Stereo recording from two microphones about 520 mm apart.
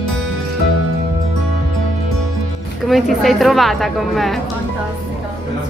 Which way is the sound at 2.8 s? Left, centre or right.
Centre.